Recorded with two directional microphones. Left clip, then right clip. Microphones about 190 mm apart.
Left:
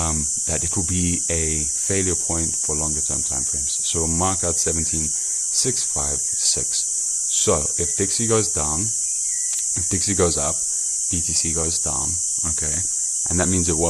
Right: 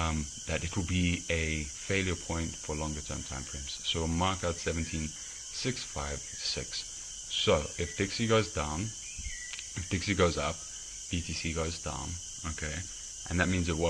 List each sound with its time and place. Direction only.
1.9 s speech: 50° left (ahead or behind)
4.2 s speech: 45° left (ahead or behind)
7.3 s speech: 50° left (ahead or behind)
9.9 s speech: 45° left (ahead or behind)
13.3 s speech: 45° left (ahead or behind)